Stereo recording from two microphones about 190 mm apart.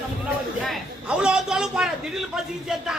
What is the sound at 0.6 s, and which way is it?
A man's voice, centre (ahead or behind).